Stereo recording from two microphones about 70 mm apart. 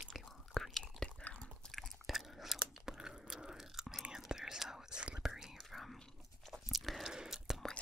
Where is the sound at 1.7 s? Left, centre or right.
Centre.